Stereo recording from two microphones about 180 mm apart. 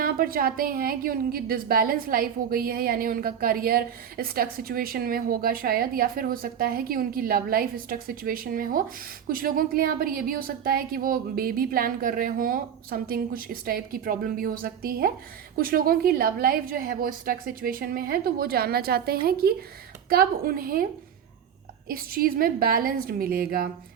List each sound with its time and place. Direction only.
0.0 s a woman's voice: 55° right (ahead or behind)
21.8 s a woman's voice: 55° right (ahead or behind)